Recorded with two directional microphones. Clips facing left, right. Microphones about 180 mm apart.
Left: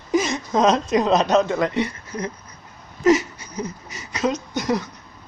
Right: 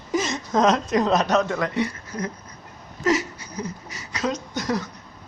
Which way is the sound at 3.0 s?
20° left (ahead or behind).